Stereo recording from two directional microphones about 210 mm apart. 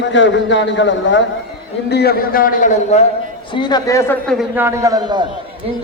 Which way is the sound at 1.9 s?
50° left (ahead or behind).